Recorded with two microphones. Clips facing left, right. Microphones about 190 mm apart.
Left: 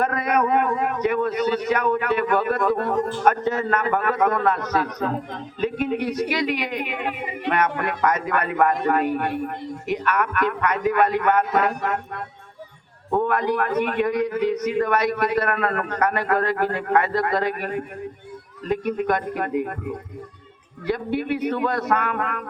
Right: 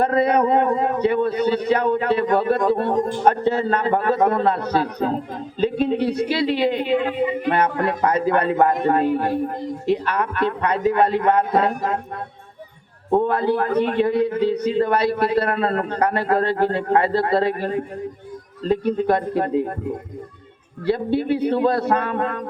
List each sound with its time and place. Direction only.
0.0 s a man's voice: 30° right (ahead or behind)
3.0 s a man's voice: 15° right (ahead or behind)
3.2 s a man's voice: 30° right (ahead or behind)
13.1 s a man's voice: 30° right (ahead or behind)